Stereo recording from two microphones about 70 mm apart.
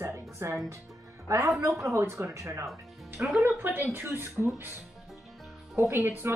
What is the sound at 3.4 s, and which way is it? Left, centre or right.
A woman's voice, right.